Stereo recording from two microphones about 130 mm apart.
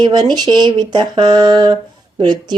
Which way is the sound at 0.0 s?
35° right (ahead or behind).